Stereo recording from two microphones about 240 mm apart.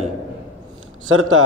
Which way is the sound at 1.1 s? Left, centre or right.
Right.